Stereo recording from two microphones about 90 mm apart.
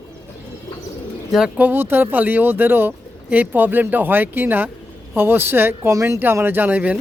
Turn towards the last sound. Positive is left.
turn(degrees=-15)  # may be behind; listen again after turning